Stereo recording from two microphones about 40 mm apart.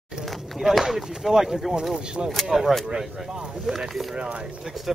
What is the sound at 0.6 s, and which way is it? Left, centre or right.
Speech, centre.